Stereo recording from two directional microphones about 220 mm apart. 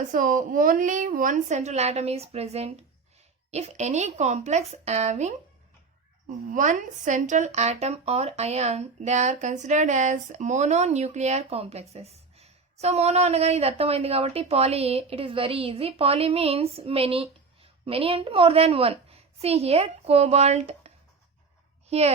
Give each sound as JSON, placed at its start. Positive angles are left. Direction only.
{"t": 0.1, "sound": "speech", "side_deg": -35}
{"t": 6.5, "sound": "a woman's voice", "side_deg": -35}